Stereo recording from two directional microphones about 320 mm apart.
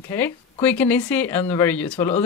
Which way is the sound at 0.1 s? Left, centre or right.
Centre.